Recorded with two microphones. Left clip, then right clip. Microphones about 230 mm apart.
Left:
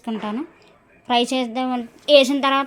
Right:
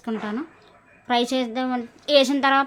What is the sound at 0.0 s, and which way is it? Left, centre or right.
A woman's voice, centre.